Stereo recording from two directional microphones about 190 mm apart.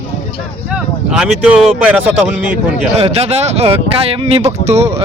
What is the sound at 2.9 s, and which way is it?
Speech, 35° right (ahead or behind).